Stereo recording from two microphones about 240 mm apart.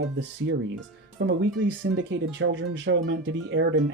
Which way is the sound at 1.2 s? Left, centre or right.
Right.